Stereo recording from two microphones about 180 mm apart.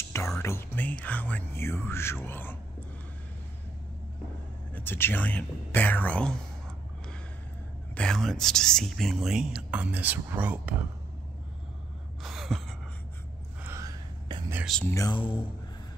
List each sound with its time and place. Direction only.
0.4 s speech: 15° left (ahead or behind)
4.7 s speech: 10° left (ahead or behind)
7.9 s speech: 5° left (ahead or behind)
12.2 s gasp: centre (ahead or behind)
13.6 s whispering: 15° right (ahead or behind)
14.6 s speech: centre (ahead or behind)
14.9 s speech: 15° left (ahead or behind)